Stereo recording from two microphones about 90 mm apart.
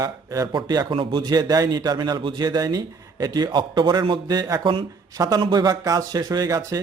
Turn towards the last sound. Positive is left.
turn(degrees=-40)  # may be behind; listen again after turning